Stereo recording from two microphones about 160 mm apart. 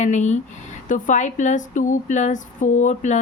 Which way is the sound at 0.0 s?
45° left (ahead or behind).